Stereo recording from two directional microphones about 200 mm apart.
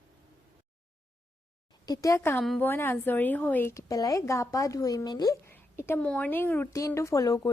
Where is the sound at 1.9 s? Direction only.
15° left (ahead or behind).